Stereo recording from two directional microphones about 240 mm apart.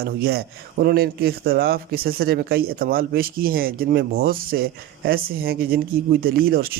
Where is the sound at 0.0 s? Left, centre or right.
Right.